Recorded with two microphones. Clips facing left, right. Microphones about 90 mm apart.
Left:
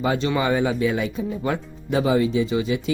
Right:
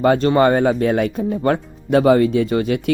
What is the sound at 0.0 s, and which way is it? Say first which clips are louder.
Speech: right 8 dB; 55° right (ahead or behind).